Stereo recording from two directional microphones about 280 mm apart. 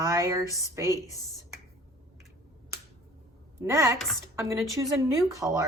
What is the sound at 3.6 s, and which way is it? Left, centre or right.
Speech, centre.